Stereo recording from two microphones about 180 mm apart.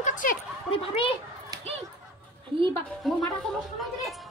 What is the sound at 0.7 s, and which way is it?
Speech, 30° left (ahead or behind).